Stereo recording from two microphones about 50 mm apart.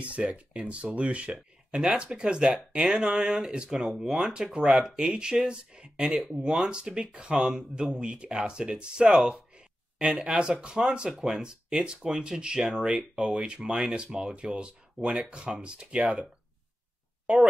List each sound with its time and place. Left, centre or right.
0.0 s speech: right
3.7 s speech: centre
4.1 s speech: centre